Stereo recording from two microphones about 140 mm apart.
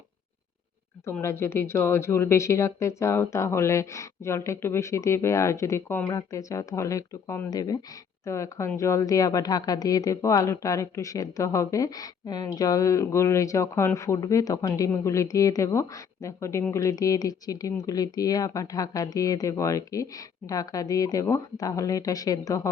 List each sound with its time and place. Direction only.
1.2 s speech: 20° left (ahead or behind)